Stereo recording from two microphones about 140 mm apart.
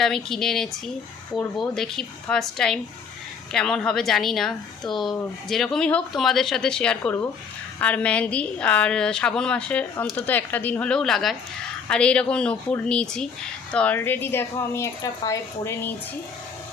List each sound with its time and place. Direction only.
0.0 s a woman's voice: 5° left (ahead or behind)